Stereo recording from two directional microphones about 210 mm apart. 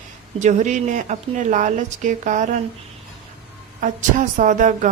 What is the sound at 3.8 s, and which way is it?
A woman's voice, 40° right (ahead or behind).